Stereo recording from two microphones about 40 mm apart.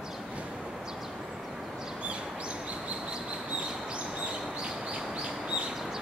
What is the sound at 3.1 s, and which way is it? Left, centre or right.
Bird, right.